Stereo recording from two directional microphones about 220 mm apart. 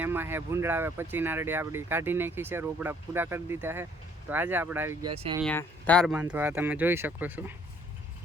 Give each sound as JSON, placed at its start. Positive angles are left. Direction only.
{"t": 0.0, "sound": "speech", "side_deg": -10}
{"t": 5.0, "sound": "speech", "side_deg": -25}
{"t": 5.4, "sound": "speech", "side_deg": 5}